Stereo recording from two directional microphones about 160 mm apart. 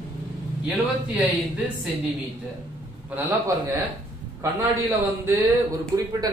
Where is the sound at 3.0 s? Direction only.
10° right (ahead or behind).